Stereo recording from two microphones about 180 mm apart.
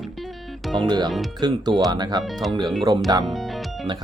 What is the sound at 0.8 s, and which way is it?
Speech, 25° right (ahead or behind).